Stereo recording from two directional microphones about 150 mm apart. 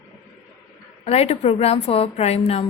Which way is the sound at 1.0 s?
45° left (ahead or behind).